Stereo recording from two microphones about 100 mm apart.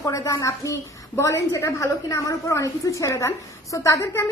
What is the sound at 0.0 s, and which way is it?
A woman's voice, 30° left (ahead or behind).